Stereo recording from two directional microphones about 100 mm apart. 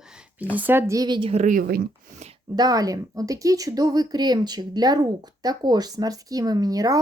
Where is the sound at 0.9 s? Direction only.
50° right (ahead or behind).